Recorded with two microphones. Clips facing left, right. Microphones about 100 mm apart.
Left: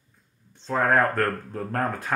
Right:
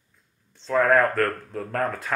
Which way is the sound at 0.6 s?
30° left (ahead or behind).